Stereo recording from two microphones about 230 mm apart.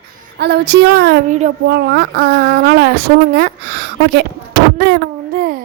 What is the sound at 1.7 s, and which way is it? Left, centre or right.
A woman's voice, right.